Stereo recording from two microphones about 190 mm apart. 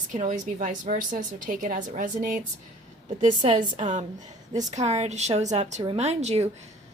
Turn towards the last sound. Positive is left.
turn(degrees=-35)  # may be behind; listen again after turning